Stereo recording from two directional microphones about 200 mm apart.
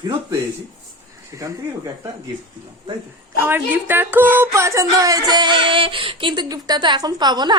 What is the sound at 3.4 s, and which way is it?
Speech, 10° right (ahead or behind).